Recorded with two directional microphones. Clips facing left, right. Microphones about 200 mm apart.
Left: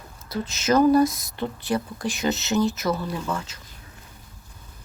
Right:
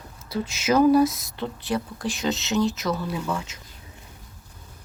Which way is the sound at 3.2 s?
10° right (ahead or behind).